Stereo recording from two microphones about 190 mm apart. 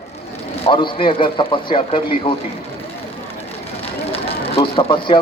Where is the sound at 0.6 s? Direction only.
25° left (ahead or behind).